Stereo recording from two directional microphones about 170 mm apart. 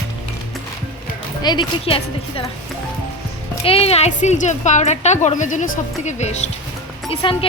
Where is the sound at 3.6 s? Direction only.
35° left (ahead or behind).